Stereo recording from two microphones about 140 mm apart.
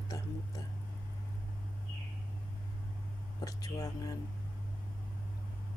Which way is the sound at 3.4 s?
25° left (ahead or behind).